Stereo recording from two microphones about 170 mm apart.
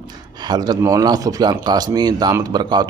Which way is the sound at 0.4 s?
25° right (ahead or behind).